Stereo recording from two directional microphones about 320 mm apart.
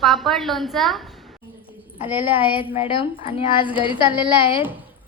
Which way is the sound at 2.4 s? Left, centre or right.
Centre.